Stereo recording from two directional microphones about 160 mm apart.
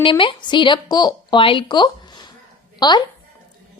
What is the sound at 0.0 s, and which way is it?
A woman's voice, 30° left (ahead or behind).